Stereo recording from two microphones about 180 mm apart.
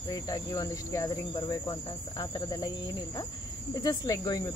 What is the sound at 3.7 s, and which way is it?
Speech, 20° left (ahead or behind).